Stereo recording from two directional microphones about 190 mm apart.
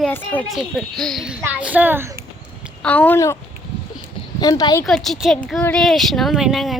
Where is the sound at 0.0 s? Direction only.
10° left (ahead or behind); by 2.0 s 10° right (ahead or behind).